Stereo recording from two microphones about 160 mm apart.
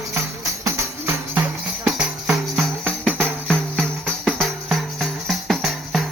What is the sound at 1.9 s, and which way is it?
Music, centre (ahead or behind).